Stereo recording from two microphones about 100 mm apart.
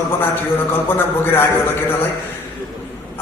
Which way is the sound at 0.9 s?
20° left (ahead or behind).